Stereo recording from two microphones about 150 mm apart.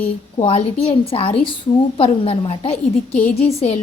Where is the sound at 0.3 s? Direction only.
40° left (ahead or behind).